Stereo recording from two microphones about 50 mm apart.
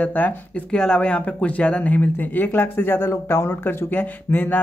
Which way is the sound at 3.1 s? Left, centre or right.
Left.